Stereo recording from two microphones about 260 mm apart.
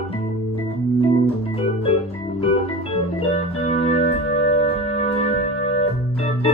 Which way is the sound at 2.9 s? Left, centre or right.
Left.